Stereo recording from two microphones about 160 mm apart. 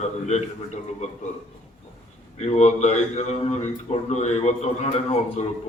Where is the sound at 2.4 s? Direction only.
45° left (ahead or behind).